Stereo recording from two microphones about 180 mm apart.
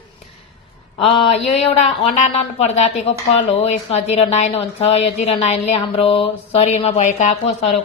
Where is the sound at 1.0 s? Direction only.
30° left (ahead or behind).